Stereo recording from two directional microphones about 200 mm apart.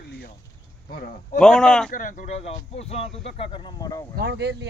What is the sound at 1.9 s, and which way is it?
Speech, 40° left (ahead or behind).